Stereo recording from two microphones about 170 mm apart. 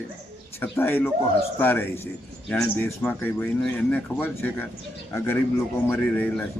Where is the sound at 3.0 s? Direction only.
10° left (ahead or behind).